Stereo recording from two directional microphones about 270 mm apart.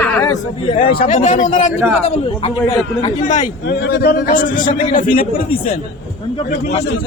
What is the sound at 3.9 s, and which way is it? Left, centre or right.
A man's voice, left.